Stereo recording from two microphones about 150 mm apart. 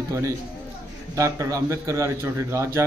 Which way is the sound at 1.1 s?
20° right (ahead or behind).